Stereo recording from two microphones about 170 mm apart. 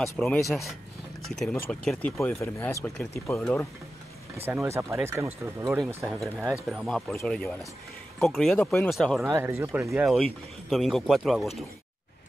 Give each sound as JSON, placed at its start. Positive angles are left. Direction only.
{"t": 0.0, "sound": "speech", "side_deg": 0}
{"t": 4.5, "sound": "speech", "side_deg": -15}
{"t": 6.0, "sound": "speech", "side_deg": 0}
{"t": 9.2, "sound": "speech", "side_deg": -15}
{"t": 9.9, "sound": "speech", "side_deg": 0}